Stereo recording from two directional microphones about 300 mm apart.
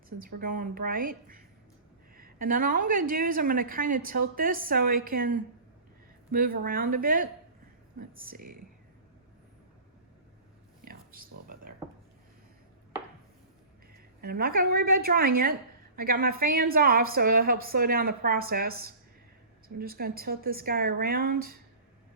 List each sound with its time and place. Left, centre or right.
0.2 s a woman's voice: right
8.3 s a woman's voice: right
10.8 s a sound: right
13.9 s a woman's voice: right